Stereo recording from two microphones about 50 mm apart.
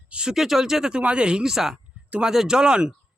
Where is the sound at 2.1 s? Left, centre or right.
Right.